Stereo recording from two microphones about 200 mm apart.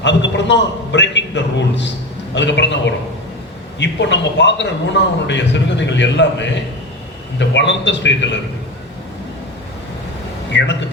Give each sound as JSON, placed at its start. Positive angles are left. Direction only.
{"t": 0.0, "sound": "a man's voice", "side_deg": 60}
{"t": 10.5, "sound": "a man's voice", "side_deg": 60}